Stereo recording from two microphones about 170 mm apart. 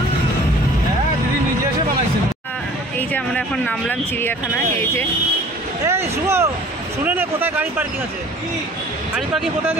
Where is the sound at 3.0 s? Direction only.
5° left (ahead or behind).